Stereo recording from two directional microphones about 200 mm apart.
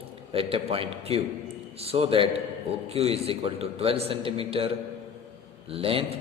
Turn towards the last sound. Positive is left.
turn(degrees=-30)  # may be behind; listen again after turning